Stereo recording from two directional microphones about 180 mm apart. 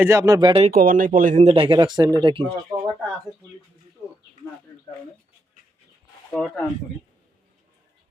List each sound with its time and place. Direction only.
0.0 s speech: 15° right (ahead or behind)
0.7 s speech: 50° right (ahead or behind); by 2.8 s 30° right (ahead or behind)
6.3 s speech: 5° left (ahead or behind)